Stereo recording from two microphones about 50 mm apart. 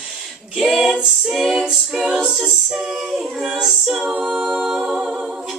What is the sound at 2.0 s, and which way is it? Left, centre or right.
A capella, centre.